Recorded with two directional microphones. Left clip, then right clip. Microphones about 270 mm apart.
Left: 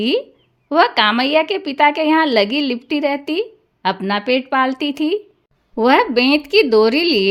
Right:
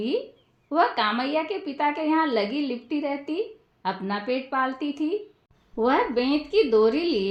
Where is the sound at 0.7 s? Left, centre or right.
Left.